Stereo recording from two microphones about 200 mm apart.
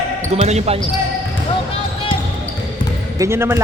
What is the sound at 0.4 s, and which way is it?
Speech, 30° right (ahead or behind).